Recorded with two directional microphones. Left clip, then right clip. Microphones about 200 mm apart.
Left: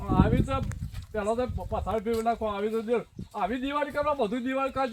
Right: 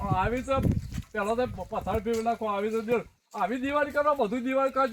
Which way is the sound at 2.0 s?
10° left (ahead or behind).